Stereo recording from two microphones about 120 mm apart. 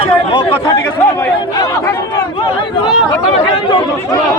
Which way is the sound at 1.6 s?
25° left (ahead or behind).